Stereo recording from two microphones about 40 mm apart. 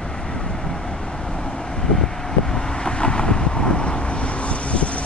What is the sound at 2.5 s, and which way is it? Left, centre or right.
Vehicle, left.